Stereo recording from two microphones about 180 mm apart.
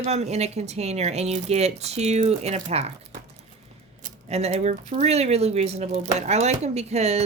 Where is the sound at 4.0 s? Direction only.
35° right (ahead or behind).